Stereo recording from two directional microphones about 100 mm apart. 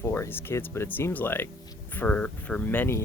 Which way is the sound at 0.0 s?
25° left (ahead or behind).